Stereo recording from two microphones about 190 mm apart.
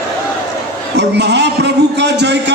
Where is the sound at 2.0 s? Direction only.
65° right (ahead or behind).